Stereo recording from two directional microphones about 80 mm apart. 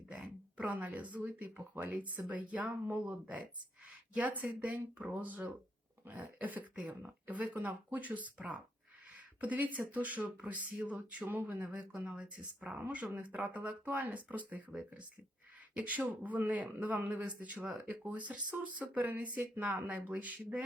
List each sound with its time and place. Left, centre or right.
0.1 s speech: centre
13.1 s speech: centre